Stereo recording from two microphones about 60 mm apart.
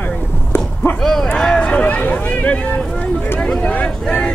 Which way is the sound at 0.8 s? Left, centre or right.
Left.